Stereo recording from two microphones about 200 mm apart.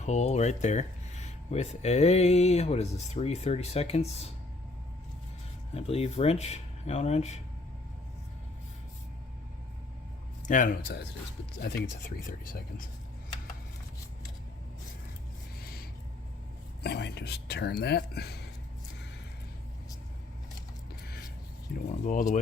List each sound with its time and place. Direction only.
0.0 s speech: 35° left (ahead or behind)
5.7 s speech: 30° left (ahead or behind)
10.4 s speech: 40° left (ahead or behind)
15.6 s a sound: 50° left (ahead or behind)
16.8 s speech: 55° left (ahead or behind)
21.0 s a sound: 50° left (ahead or behind)
21.7 s speech: 45° left (ahead or behind)